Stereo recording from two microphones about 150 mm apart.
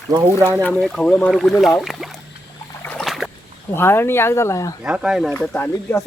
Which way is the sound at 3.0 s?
Centre (ahead or behind).